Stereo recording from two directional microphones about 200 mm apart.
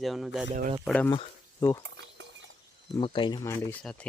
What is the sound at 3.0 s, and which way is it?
Speech, 25° left (ahead or behind).